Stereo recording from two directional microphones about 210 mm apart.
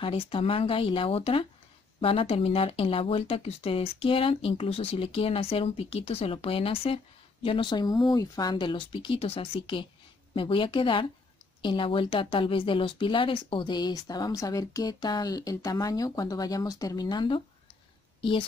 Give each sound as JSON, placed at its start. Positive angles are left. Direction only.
{"t": 0.0, "sound": "speech", "side_deg": 25}